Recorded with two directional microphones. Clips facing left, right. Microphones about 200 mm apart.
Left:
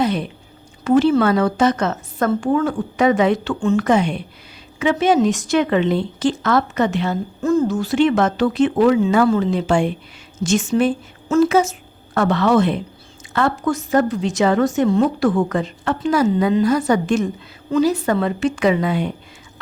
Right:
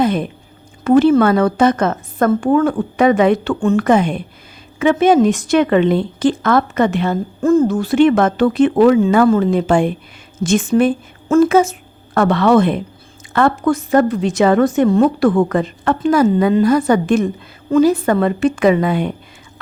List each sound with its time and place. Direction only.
0.0 s a woman's voice: 50° right (ahead or behind)